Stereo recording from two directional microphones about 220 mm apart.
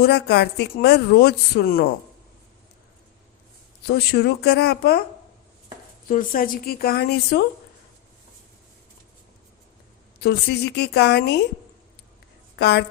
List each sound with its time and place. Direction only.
0.0 s speech: 45° left (ahead or behind)
3.8 s speech: 45° left (ahead or behind)
6.1 s a woman's voice: 40° left (ahead or behind)
10.2 s speech: 45° left (ahead or behind)
12.5 s a woman's voice: 50° left (ahead or behind)